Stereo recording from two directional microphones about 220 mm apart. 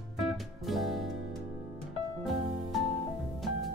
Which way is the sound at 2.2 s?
Centre (ahead or behind).